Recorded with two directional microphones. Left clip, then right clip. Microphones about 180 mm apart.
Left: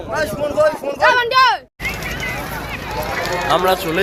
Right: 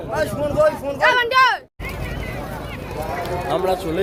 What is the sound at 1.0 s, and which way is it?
Speech, 55° left (ahead or behind).